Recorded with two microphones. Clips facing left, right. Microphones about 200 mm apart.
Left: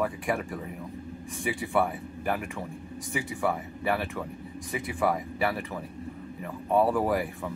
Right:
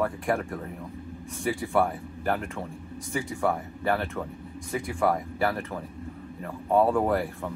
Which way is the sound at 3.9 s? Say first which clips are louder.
Right 2 dB; 5° left (ahead or behind).